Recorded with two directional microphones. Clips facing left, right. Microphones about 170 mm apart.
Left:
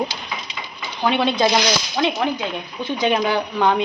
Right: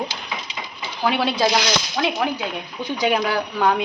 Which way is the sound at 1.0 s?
5° right (ahead or behind).